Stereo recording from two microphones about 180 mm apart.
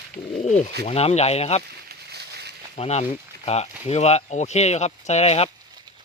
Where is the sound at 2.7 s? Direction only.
35° left (ahead or behind).